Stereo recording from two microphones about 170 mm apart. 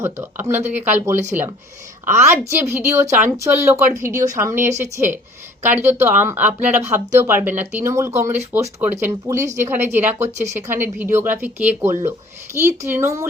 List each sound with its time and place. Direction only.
0.0 s speech: 15° right (ahead or behind)